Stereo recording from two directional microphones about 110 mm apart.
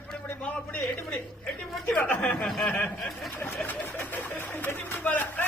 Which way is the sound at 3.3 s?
20° left (ahead or behind).